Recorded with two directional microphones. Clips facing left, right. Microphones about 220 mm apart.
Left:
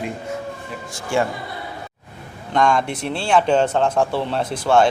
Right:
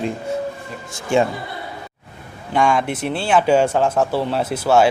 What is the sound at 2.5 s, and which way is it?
Speech, 5° right (ahead or behind).